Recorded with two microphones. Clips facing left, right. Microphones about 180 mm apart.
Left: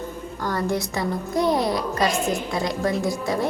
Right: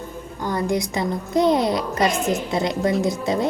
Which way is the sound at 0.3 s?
15° right (ahead or behind).